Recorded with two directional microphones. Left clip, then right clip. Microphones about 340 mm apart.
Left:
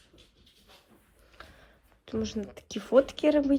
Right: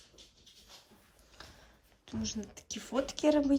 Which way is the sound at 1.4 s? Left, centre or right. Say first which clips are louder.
Left 3 dB; centre.